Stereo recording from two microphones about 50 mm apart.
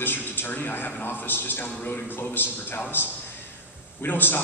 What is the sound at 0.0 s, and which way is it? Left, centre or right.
A man's voice, left.